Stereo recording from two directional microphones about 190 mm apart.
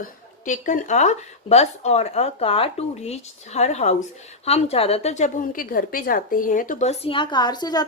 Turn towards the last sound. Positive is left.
turn(degrees=20)  # may be behind; listen again after turning